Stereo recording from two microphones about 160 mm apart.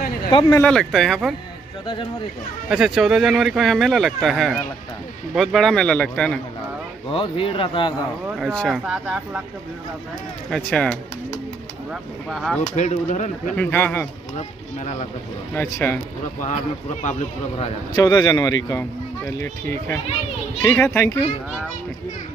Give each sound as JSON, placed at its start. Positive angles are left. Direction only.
{"t": 0.3, "sound": "speech", "side_deg": 30}
{"t": 0.6, "sound": "speech", "side_deg": 5}
{"t": 2.7, "sound": "speech", "side_deg": -5}
{"t": 7.1, "sound": "speech", "side_deg": 35}
{"t": 8.4, "sound": "speech", "side_deg": 0}
{"t": 10.5, "sound": "speech", "side_deg": 5}
{"t": 12.7, "sound": "speech", "side_deg": 45}
{"t": 13.6, "sound": "a child's voice", "side_deg": 10}
{"t": 15.5, "sound": "a child's voice", "side_deg": 20}
{"t": 17.0, "sound": "speech", "side_deg": 45}
{"t": 17.9, "sound": "a child's voice", "side_deg": 25}